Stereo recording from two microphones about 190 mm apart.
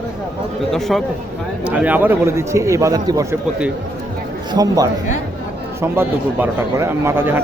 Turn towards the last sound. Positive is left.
turn(degrees=-10)  # may be behind; listen again after turning